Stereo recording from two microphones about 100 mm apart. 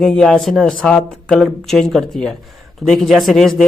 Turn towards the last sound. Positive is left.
turn(degrees=0)  # may be behind; listen again after turning